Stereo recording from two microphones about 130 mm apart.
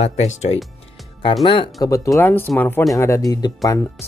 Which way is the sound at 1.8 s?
25° left (ahead or behind).